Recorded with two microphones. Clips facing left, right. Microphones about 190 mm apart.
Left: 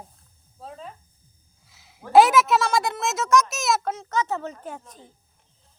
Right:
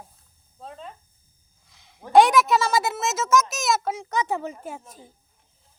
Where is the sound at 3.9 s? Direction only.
15° right (ahead or behind).